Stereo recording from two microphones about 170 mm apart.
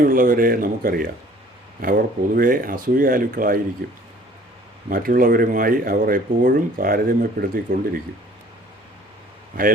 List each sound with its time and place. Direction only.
0.0 s speech: 55° right (ahead or behind)